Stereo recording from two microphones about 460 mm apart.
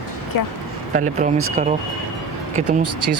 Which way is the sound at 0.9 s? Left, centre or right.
Centre.